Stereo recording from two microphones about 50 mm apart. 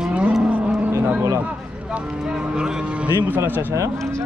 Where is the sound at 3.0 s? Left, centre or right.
Right.